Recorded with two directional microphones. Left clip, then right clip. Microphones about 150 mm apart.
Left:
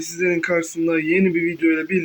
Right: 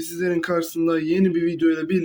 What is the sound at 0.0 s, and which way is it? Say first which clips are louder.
Speech: left 3 dB; 30° right (ahead or behind).